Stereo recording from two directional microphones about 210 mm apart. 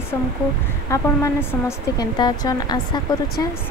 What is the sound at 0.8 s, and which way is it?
Speech, 15° left (ahead or behind).